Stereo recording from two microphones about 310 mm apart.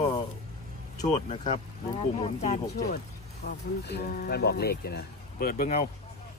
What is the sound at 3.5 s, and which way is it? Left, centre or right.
Speech, left.